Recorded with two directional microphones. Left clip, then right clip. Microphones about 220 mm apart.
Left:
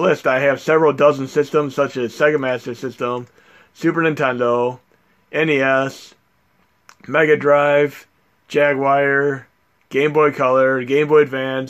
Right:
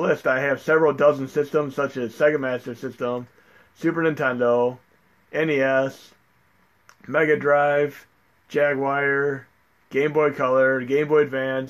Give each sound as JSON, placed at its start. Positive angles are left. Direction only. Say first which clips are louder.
{"t": 0.0, "sound": "speech", "louder": "left 6 dB", "side_deg": 35}